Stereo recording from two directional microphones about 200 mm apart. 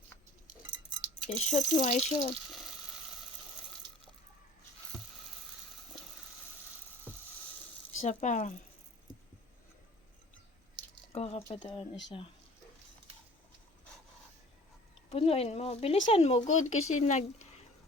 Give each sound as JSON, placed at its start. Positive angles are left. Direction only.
{"t": 1.3, "sound": "speech", "side_deg": 35}
{"t": 8.0, "sound": "speech", "side_deg": 35}
{"t": 11.1, "sound": "speech", "side_deg": 30}
{"t": 15.1, "sound": "speech", "side_deg": 30}